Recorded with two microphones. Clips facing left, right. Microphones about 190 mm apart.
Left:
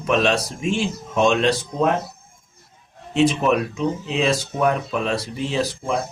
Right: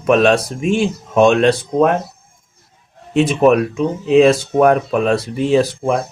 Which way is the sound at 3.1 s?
55° right (ahead or behind).